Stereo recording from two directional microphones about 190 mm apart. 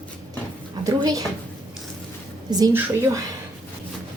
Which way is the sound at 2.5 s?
20° right (ahead or behind).